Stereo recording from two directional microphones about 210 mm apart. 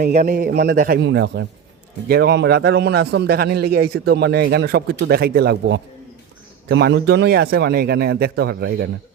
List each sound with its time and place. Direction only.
0.1 s a man's voice: 40° right (ahead or behind)